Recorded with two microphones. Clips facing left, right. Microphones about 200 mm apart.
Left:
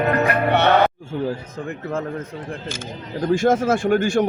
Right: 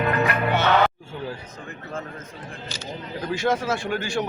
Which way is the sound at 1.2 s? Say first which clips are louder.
Left 8 dB; 60° left (ahead or behind).